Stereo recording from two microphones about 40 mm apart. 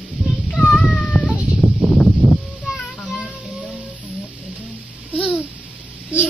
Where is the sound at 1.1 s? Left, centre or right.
Left.